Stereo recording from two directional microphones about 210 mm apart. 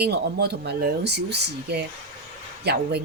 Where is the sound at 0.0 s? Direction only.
50° right (ahead or behind).